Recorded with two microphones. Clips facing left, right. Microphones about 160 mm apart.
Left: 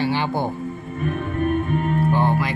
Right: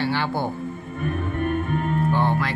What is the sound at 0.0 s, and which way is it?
Music, 15° left (ahead or behind).